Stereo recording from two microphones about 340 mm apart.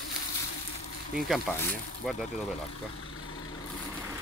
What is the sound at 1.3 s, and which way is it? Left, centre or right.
Speech, centre.